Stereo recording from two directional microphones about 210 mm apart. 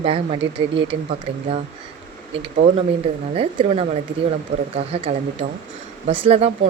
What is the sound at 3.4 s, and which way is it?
A woman's voice, 30° right (ahead or behind).